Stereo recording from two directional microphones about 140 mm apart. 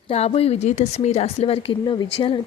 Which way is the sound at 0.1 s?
45° left (ahead or behind).